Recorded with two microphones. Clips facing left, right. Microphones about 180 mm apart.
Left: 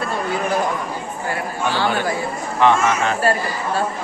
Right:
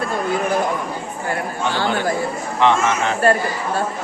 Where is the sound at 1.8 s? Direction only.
15° right (ahead or behind).